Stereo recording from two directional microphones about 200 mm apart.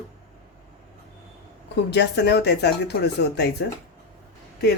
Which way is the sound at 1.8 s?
55° left (ahead or behind).